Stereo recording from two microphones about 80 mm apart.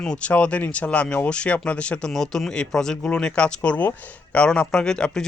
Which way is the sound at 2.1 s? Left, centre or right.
Centre.